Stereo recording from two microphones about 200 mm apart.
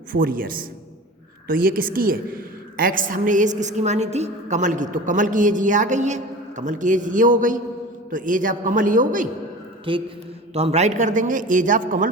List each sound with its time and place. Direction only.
0.1 s a man's voice: 45° right (ahead or behind)
9.9 s a sound: 25° right (ahead or behind)
10.5 s a woman's voice: 30° right (ahead or behind)